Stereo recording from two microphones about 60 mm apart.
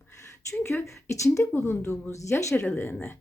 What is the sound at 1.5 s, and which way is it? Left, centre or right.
Speech, left.